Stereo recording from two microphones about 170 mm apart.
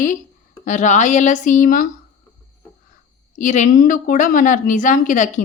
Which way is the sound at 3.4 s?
45° left (ahead or behind).